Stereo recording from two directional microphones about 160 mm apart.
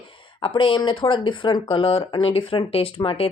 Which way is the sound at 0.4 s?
30° left (ahead or behind).